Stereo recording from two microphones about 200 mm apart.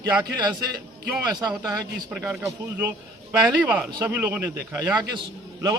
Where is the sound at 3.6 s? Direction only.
20° right (ahead or behind).